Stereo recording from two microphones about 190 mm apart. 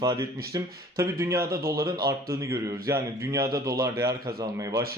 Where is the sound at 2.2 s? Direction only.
15° right (ahead or behind).